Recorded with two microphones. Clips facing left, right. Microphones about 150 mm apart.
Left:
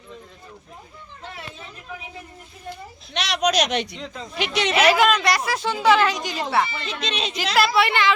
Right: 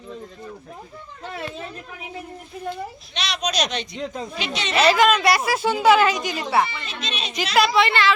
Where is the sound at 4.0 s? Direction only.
45° right (ahead or behind).